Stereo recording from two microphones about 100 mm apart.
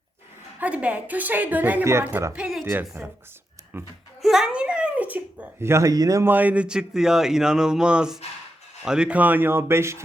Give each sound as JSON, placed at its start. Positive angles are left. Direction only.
{"t": 0.6, "sound": "speech", "side_deg": -15}
{"t": 4.2, "sound": "speech", "side_deg": 0}
{"t": 6.2, "sound": "speech", "side_deg": -15}